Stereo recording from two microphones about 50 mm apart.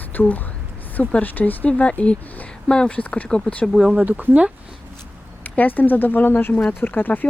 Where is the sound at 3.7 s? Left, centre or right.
Centre.